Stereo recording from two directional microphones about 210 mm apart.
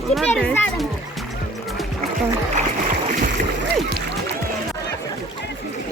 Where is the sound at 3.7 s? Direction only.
50° right (ahead or behind).